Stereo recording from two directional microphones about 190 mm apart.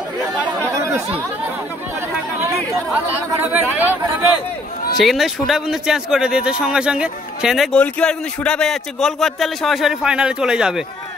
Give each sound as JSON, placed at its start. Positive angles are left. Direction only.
{"t": 0.7, "sound": "chatter", "side_deg": -15}
{"t": 3.5, "sound": "speech", "side_deg": -10}